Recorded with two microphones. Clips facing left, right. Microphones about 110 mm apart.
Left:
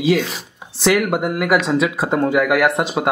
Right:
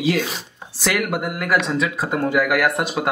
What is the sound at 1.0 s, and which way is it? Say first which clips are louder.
Speech: left 5 dB; 20° left (ahead or behind).